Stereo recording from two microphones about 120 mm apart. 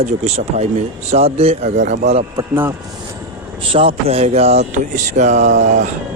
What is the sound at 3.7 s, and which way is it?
Speech, 50° right (ahead or behind).